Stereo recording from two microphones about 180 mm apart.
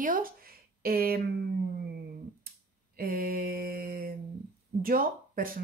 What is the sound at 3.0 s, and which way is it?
Mantra, 55° right (ahead or behind).